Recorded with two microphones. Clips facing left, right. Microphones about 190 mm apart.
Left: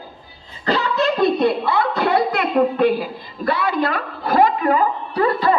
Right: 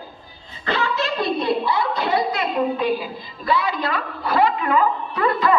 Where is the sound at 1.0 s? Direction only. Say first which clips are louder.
Left 6 dB; 55° left (ahead or behind).